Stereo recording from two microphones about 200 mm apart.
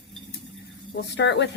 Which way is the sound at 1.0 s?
60° left (ahead or behind).